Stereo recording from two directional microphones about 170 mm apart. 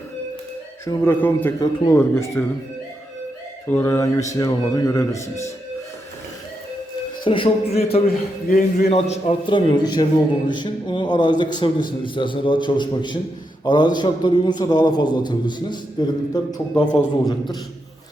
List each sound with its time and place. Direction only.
0.9 s speech: 15° left (ahead or behind)
3.7 s a man's voice: 15° left (ahead or behind)
7.3 s a man's voice: 30° left (ahead or behind)
8.0 s a man's voice: 60° left (ahead or behind)
8.9 s a man's voice: 35° left (ahead or behind)